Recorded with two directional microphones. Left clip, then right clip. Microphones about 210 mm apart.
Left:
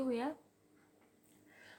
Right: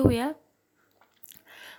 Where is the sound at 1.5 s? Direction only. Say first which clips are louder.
Right 13 dB; 40° right (ahead or behind).